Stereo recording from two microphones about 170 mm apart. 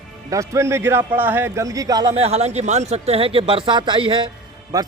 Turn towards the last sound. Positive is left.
turn(degrees=-20)  # may be behind; listen again after turning